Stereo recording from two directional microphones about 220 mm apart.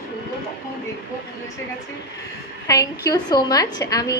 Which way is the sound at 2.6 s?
15° left (ahead or behind).